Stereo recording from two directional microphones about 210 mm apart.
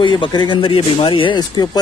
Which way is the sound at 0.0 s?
20° left (ahead or behind).